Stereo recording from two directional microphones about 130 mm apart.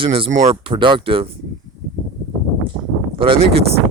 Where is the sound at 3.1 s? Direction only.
40° right (ahead or behind).